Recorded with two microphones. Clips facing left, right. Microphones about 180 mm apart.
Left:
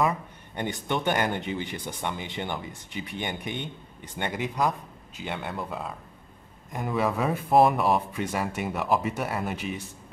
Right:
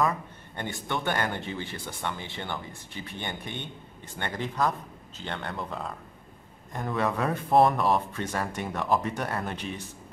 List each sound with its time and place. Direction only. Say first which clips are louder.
0.6 s speech: left 3 dB; 20° left (ahead or behind)